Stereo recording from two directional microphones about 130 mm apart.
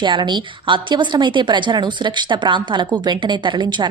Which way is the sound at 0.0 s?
35° right (ahead or behind).